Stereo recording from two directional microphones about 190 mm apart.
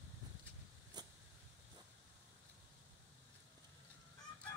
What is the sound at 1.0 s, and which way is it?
Vehicle, 20° right (ahead or behind).